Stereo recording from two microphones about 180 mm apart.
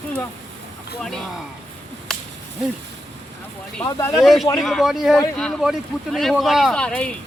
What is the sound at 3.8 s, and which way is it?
Speech, 15° left (ahead or behind).